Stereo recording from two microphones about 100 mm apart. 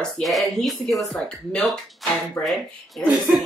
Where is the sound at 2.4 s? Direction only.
25° left (ahead or behind).